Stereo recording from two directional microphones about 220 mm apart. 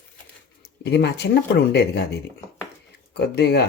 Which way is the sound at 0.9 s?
50° left (ahead or behind).